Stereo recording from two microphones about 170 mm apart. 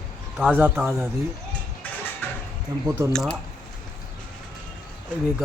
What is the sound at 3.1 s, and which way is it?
Speech, 5° left (ahead or behind).